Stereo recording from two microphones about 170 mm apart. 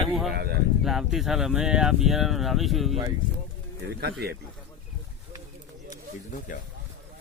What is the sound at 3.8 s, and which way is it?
Speech, 65° right (ahead or behind).